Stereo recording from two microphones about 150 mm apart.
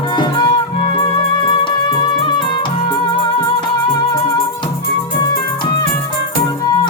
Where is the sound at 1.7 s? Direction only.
30° left (ahead or behind).